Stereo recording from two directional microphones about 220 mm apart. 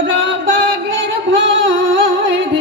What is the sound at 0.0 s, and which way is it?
Music, 60° right (ahead or behind).